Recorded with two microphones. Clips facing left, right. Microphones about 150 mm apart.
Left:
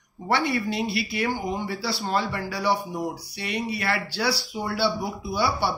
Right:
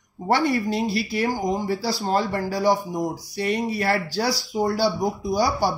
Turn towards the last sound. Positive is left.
turn(degrees=-40)  # may be behind; listen again after turning